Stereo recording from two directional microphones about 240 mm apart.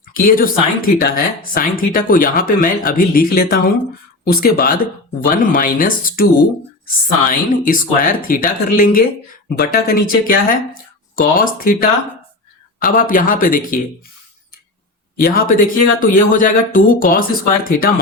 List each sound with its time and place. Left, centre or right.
0.1 s a woman's voice: left
15.2 s a woman's voice: left